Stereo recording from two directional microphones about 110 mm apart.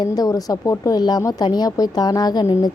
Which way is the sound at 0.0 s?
35° left (ahead or behind).